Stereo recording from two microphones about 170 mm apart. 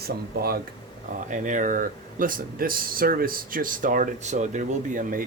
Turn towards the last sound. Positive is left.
turn(degrees=-50)  # may be behind; listen again after turning